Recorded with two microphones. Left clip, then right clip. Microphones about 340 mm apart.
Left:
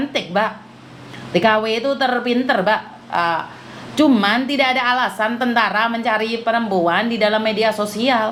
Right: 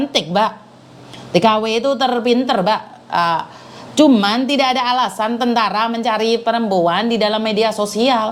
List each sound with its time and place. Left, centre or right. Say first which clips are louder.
0.1 s a woman's voice: right 3 dB; right
3.9 s a woman's voice: right 2 dB; right